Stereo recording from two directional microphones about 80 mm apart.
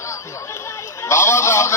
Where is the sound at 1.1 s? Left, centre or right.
Left.